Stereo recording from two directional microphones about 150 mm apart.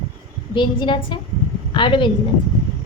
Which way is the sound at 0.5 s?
35° left (ahead or behind).